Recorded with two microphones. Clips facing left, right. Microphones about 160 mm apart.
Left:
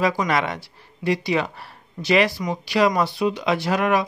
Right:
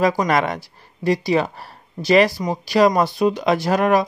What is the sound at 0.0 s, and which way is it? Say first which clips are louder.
Speech: right 3 dB; 45° right (ahead or behind).